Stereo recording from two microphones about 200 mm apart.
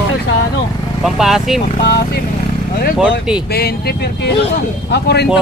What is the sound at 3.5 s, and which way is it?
Speech, 50° left (ahead or behind).